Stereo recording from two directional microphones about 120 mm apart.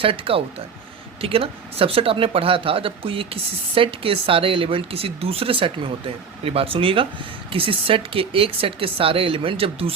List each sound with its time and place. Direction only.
0.0 s speech: 50° right (ahead or behind)